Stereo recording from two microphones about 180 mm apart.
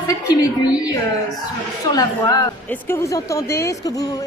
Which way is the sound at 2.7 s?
15° left (ahead or behind).